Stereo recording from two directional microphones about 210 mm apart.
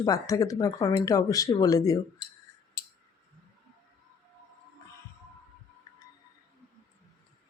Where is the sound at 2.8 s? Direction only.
50° left (ahead or behind).